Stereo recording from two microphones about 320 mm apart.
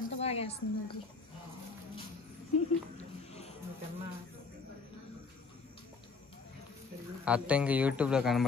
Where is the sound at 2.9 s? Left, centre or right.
Centre.